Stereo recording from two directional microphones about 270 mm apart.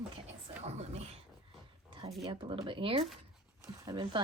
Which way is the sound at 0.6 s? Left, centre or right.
Right.